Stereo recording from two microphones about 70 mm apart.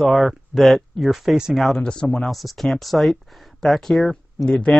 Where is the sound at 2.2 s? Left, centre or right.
Centre.